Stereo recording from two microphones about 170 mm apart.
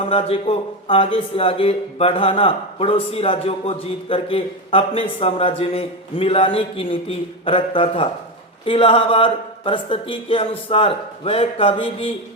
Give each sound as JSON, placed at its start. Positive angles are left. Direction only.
{"t": 0.0, "sound": "speech", "side_deg": 35}